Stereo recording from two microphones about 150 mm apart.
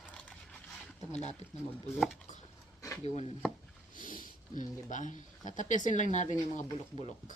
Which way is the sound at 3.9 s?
65° left (ahead or behind).